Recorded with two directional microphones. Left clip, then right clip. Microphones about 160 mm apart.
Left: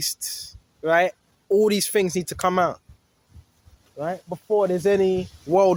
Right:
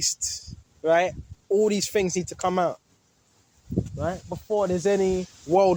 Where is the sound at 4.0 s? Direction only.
20° left (ahead or behind).